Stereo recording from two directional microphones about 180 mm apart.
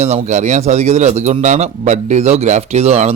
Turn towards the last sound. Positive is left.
turn(degrees=-35)  # may be behind; listen again after turning